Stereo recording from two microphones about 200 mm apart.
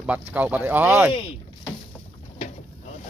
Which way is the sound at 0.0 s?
5° right (ahead or behind).